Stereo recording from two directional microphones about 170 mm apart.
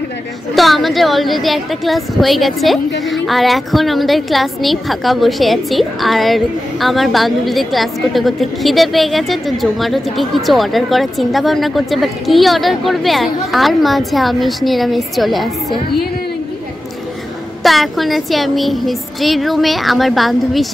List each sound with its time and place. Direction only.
0.6 s a woman's voice: centre (ahead or behind)
17.6 s a woman's voice: centre (ahead or behind)